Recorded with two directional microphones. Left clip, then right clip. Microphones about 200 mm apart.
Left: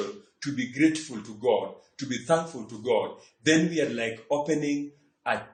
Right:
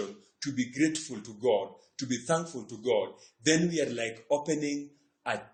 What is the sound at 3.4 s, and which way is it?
A man's voice, 40° right (ahead or behind).